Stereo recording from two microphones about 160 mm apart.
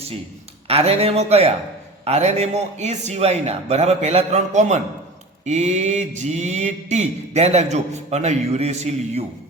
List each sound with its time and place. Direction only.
0.7 s speech: 40° right (ahead or behind)
2.0 s mantra: 45° right (ahead or behind)